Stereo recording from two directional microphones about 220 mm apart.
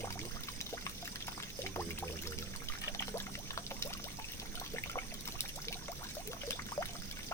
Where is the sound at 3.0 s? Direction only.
15° left (ahead or behind).